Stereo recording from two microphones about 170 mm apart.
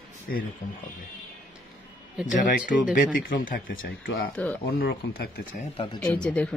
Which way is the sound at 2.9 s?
55° left (ahead or behind).